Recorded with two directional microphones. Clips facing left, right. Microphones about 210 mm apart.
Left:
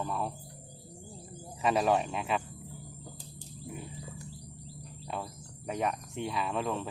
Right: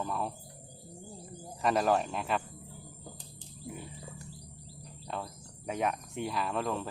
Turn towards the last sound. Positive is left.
turn(degrees=0)  # may be behind; listen again after turning